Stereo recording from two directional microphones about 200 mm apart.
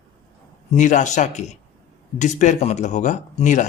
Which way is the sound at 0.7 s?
40° left (ahead or behind).